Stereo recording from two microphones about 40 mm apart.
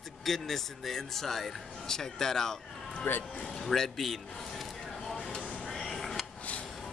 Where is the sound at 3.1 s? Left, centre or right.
Left.